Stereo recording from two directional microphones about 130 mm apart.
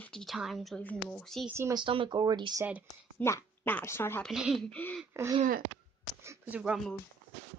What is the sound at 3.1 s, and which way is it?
A woman's voice, 20° left (ahead or behind).